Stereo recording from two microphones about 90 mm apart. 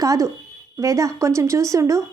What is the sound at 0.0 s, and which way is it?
A woman's voice, 40° right (ahead or behind).